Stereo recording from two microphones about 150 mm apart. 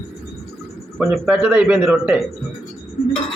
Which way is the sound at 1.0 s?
5° right (ahead or behind).